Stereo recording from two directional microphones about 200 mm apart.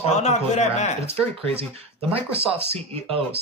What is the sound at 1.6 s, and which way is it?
Speech, 30° right (ahead or behind).